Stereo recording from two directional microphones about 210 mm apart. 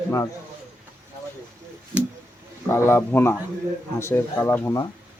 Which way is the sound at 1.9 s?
5° right (ahead or behind).